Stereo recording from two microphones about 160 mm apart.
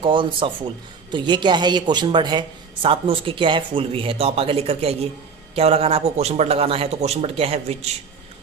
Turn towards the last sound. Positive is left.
turn(degrees=-40)  # may be behind; listen again after turning